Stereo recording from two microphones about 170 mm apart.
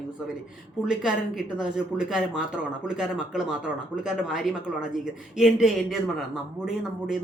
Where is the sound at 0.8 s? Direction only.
5° right (ahead or behind).